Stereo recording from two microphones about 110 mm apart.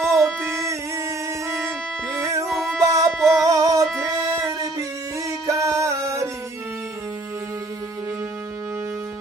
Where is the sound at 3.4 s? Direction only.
30° right (ahead or behind).